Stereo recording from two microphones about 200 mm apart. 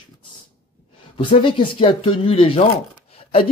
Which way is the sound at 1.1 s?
25° left (ahead or behind).